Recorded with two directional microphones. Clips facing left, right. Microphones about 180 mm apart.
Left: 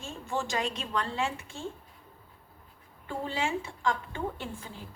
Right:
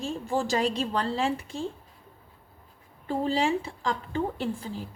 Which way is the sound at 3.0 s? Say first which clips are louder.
Right 7 dB; 35° right (ahead or behind).